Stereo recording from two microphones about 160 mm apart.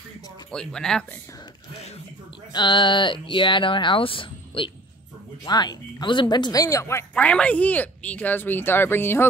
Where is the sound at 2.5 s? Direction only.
30° left (ahead or behind).